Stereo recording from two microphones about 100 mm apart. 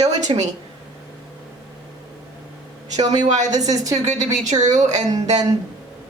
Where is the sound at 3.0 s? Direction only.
45° right (ahead or behind).